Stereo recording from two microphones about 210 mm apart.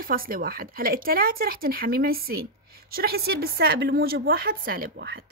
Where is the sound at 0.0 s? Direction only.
45° right (ahead or behind).